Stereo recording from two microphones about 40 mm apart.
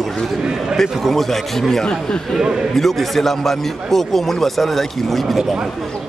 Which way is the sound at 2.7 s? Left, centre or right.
Centre.